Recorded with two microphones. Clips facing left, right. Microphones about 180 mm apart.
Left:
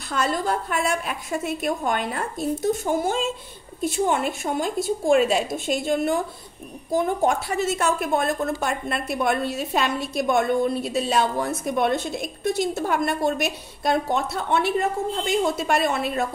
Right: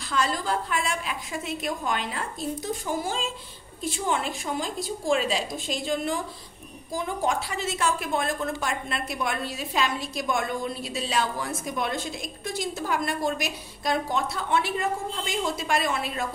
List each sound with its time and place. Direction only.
0.1 s a woman's voice: 55° left (ahead or behind)